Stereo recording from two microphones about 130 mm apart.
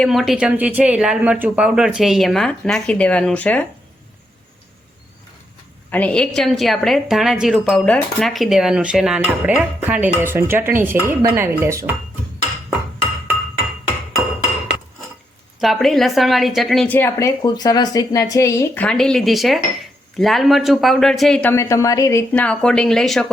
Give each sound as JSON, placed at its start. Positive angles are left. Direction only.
{"t": 0.0, "sound": "a woman's voice", "side_deg": 0}
{"t": 5.9, "sound": "a woman's voice", "side_deg": 10}
{"t": 15.6, "sound": "a woman's voice", "side_deg": 0}
{"t": 16.9, "sound": "a woman's voice", "side_deg": 15}
{"t": 17.4, "sound": "a woman's voice", "side_deg": 30}
{"t": 21.5, "sound": "a woman's voice", "side_deg": 20}
{"t": 22.3, "sound": "a woman's voice", "side_deg": 10}